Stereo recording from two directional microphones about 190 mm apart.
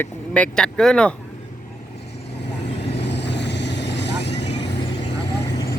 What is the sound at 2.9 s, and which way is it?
Vehicle, 65° left (ahead or behind).